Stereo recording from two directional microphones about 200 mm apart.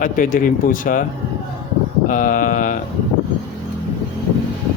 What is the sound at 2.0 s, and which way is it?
Speech, 40° left (ahead or behind).